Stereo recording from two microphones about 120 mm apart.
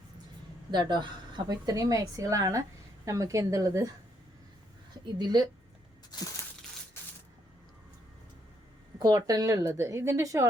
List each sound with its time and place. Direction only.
0.7 s a woman's voice: 40° right (ahead or behind)
5.0 s a woman's voice: 35° right (ahead or behind)
6.1 s a sound: 35° left (ahead or behind)
9.0 s a woman's voice: 30° right (ahead or behind)